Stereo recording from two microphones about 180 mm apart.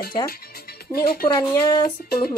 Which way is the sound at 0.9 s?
55° left (ahead or behind).